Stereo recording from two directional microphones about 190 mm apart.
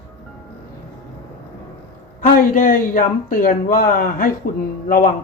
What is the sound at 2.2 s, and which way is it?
Speech, 45° left (ahead or behind).